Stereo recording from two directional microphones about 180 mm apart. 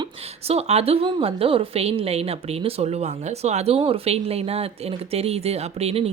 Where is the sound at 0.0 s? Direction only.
35° right (ahead or behind).